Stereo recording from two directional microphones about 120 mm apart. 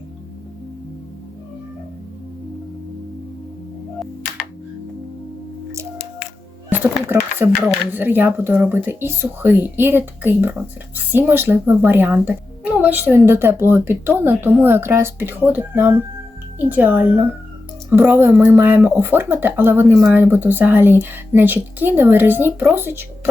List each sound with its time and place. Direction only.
6.7 s speech: 15° right (ahead or behind)